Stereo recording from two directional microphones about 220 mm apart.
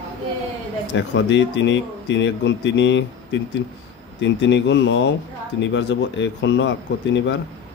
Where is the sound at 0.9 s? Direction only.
55° left (ahead or behind).